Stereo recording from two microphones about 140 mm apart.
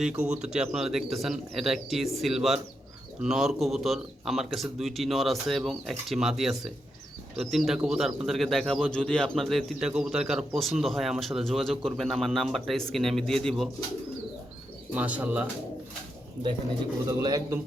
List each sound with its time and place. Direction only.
0.0 s speech: 10° right (ahead or behind)
14.9 s speech: 10° right (ahead or behind)
17.1 s speech: 25° right (ahead or behind)